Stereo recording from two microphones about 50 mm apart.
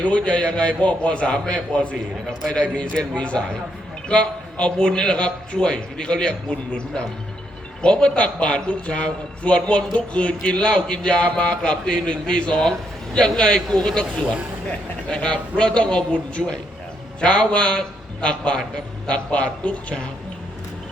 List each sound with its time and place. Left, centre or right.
0.0 s speech: left